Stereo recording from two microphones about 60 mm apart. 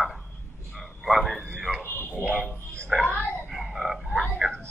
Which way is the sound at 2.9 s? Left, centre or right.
Centre.